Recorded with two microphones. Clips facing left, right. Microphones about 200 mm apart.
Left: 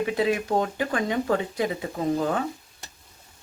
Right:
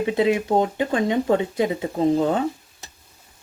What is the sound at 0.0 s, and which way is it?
Speech, 25° right (ahead or behind).